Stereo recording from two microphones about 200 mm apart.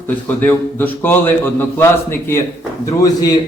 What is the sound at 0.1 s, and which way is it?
A man's voice, 10° left (ahead or behind).